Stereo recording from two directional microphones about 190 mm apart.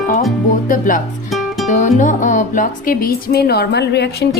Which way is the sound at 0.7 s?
45° left (ahead or behind).